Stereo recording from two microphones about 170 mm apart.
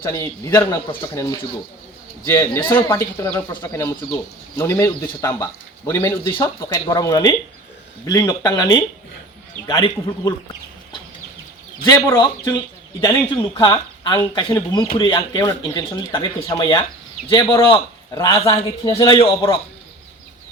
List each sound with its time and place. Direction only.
0.0 s speech: 15° left (ahead or behind)
2.2 s speech: 15° left (ahead or behind)
11.9 s speech: 20° left (ahead or behind)